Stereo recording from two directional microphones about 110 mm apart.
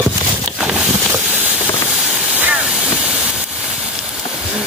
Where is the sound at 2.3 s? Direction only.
15° right (ahead or behind).